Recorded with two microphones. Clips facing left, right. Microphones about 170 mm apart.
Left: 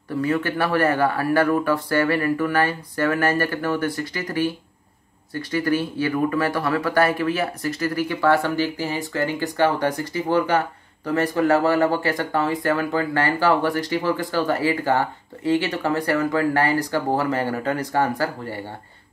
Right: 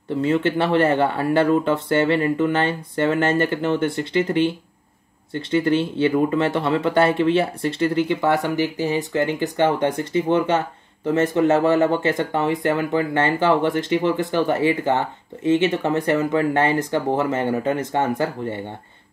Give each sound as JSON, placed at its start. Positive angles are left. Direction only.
{"t": 0.1, "sound": "speech", "side_deg": -25}